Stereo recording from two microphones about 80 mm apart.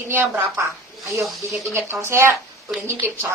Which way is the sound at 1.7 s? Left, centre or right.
Right.